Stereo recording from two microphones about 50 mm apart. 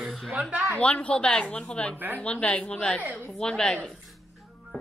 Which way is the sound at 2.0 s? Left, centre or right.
Right.